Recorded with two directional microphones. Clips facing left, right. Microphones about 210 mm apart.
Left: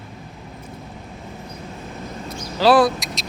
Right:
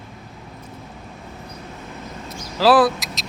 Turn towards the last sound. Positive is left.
turn(degrees=0)  # may be behind; listen again after turning